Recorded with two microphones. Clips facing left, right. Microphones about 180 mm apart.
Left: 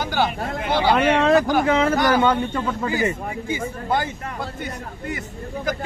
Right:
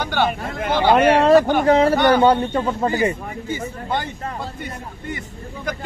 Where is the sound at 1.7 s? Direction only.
35° right (ahead or behind).